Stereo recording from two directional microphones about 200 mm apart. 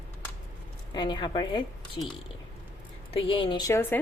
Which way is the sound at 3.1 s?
25° left (ahead or behind).